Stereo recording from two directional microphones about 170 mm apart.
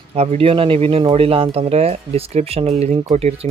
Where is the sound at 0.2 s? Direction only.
35° right (ahead or behind).